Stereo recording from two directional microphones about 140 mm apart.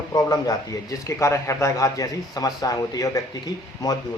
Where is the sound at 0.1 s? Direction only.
25° left (ahead or behind).